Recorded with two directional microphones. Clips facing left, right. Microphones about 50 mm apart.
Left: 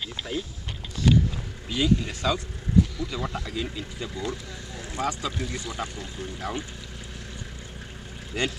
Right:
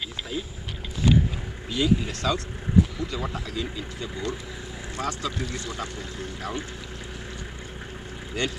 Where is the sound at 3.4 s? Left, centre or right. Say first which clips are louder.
Even; centre.